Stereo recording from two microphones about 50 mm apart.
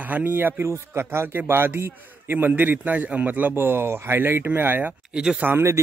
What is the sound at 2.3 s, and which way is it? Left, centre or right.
Speech, right.